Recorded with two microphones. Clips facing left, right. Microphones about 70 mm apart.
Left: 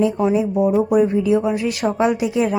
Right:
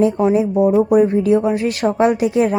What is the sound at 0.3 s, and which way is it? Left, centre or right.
Speech, right.